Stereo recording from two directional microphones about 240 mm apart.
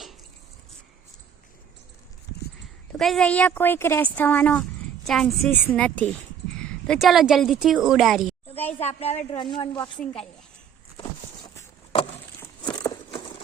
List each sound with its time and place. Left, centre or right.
3.0 s a woman's voice: centre
8.9 s a woman's voice: left
10.0 s a woman's voice: centre
11.4 s a sound: left